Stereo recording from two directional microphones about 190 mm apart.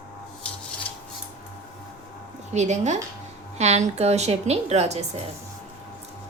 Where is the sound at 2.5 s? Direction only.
35° right (ahead or behind).